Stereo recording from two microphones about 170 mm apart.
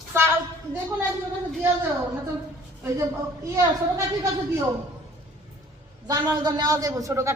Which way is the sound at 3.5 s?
20° right (ahead or behind).